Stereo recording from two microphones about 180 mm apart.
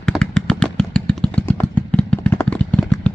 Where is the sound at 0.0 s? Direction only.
5° left (ahead or behind).